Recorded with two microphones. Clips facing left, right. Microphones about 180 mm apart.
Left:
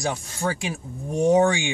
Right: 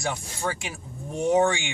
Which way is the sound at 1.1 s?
15° left (ahead or behind).